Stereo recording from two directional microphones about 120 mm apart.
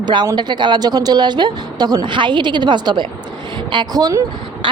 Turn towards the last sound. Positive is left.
turn(degrees=-30)  # may be behind; listen again after turning